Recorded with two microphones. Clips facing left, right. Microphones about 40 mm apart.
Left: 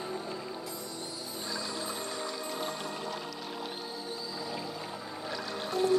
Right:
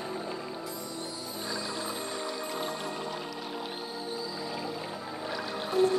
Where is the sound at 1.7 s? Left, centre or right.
Centre.